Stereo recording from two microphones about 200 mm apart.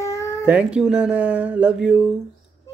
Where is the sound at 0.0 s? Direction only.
15° left (ahead or behind).